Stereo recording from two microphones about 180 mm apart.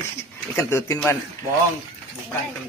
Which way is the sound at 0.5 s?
15° left (ahead or behind).